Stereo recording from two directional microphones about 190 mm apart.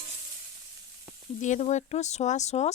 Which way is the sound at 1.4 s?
40° left (ahead or behind).